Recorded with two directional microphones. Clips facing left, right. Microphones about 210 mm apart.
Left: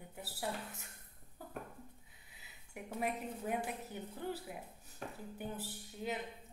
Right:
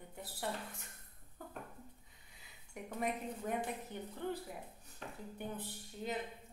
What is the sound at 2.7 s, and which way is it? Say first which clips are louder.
A woman's voice: even; 5° left (ahead or behind).